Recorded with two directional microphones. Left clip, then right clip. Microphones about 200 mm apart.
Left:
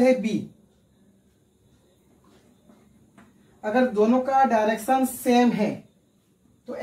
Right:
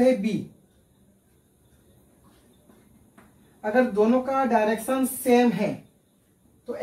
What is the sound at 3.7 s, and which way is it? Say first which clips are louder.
Speech: even; 10° right (ahead or behind).